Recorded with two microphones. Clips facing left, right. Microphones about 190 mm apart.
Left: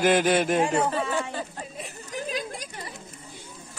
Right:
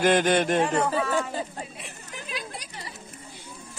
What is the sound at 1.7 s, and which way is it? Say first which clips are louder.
Chatter: left 6 dB; 40° left (ahead or behind).